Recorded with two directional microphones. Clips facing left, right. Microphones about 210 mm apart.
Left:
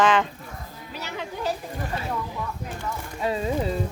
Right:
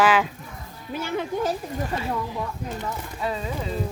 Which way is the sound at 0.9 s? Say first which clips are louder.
Right 7 dB; 50° right (ahead or behind).